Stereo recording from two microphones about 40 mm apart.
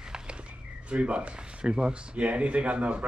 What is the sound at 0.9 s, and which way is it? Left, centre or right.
Speech, right.